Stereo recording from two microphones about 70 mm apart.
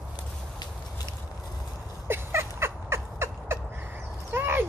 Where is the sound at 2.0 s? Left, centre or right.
Right.